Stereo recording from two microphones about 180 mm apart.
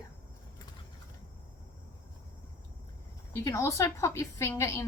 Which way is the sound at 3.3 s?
15° left (ahead or behind).